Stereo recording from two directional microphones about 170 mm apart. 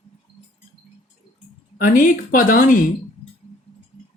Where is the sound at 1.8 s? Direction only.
50° left (ahead or behind).